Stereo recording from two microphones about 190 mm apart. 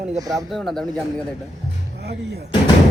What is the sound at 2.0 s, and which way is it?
Speech, 60° right (ahead or behind).